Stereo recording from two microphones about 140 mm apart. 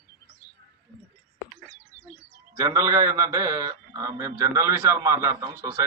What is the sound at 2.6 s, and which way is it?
A man's voice, 20° right (ahead or behind).